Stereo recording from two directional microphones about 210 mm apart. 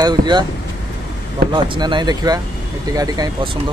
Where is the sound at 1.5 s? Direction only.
20° right (ahead or behind).